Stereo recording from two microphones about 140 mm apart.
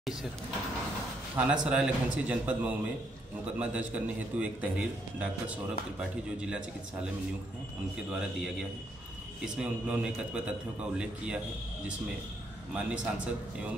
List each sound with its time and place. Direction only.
1.5 s a man's voice: 5° right (ahead or behind)
8.1 s a man's voice: 5° right (ahead or behind)
9.6 s a man's voice: 10° right (ahead or behind)
12.7 s a man's voice: 10° right (ahead or behind)